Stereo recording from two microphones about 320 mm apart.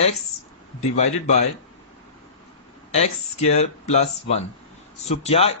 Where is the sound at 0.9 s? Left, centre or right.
Left.